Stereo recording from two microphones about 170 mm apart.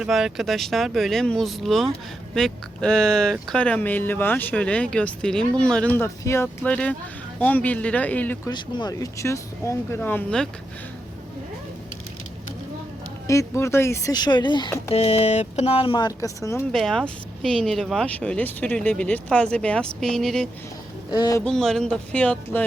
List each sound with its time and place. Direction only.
0.0 s speech: 5° right (ahead or behind)
8.4 s speech: 25° left (ahead or behind); by 10.5 s 5° left (ahead or behind)
13.2 s speech: 15° left (ahead or behind)
14.8 s speech: 40° left (ahead or behind); by 16.6 s 15° left (ahead or behind)
16.7 s speech: 5° left (ahead or behind)
21.1 s speech: 25° left (ahead or behind)
21.4 s speech: 5° left (ahead or behind)